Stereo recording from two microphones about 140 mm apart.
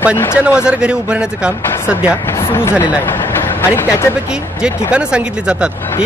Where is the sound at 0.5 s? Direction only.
5° right (ahead or behind).